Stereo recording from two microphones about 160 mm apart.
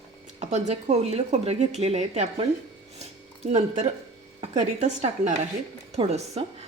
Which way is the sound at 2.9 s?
40° right (ahead or behind).